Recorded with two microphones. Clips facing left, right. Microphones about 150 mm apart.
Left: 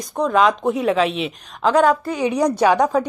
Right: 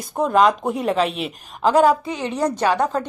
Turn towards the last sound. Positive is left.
turn(degrees=10)  # may be behind; listen again after turning